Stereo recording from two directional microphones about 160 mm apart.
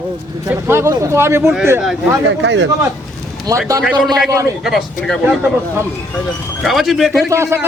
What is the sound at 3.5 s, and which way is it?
Speech, 25° right (ahead or behind).